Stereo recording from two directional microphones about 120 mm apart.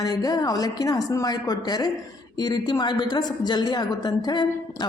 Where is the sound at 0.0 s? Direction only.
30° left (ahead or behind).